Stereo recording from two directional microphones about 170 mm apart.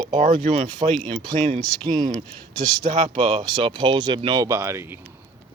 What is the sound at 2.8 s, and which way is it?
Speech, 40° right (ahead or behind).